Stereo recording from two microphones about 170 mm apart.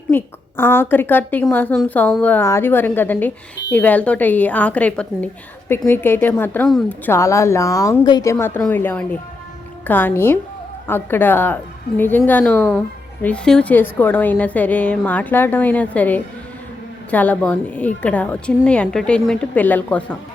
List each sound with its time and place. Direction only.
0.1 s a woman's voice: 15° left (ahead or behind)
7.1 s speech: 15° left (ahead or behind)